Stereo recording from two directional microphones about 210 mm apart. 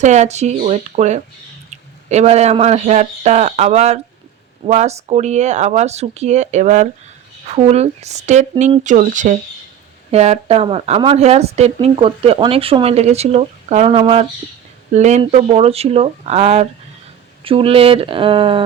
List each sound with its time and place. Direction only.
0.0 s speech: 35° right (ahead or behind)